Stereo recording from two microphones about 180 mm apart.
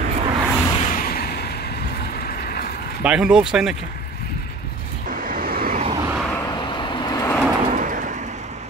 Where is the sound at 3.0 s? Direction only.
5° right (ahead or behind).